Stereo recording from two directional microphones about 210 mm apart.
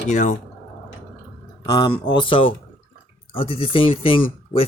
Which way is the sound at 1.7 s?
20° left (ahead or behind).